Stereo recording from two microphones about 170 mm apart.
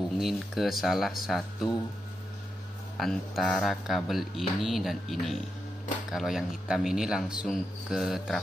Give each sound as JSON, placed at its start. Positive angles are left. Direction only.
{"t": 0.2, "sound": "speech", "side_deg": 0}
{"t": 3.0, "sound": "speech", "side_deg": 0}